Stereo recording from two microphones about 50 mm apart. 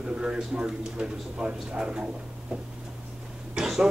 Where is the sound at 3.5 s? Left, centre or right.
Centre.